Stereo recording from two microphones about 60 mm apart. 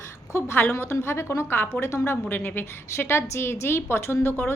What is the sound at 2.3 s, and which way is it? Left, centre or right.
A woman's voice, left.